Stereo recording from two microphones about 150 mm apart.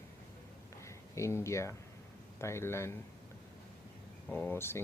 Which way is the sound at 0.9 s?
20° left (ahead or behind).